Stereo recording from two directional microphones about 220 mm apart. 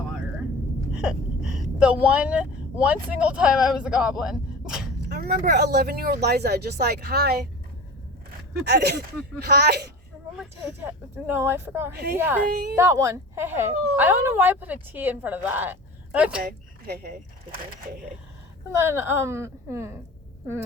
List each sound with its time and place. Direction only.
1.0 s speech: 5° right (ahead or behind)
5.0 s speech: 45° right (ahead or behind)
8.6 s speech: 50° right (ahead or behind)
10.3 s speech: 5° right (ahead or behind)
12.5 s speech: 45° right (ahead or behind)
12.7 s speech: 15° right (ahead or behind)
16.4 s a woman's voice: 45° right (ahead or behind)
18.8 s speech: 10° right (ahead or behind)